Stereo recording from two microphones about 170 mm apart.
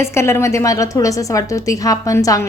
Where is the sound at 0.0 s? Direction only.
15° left (ahead or behind).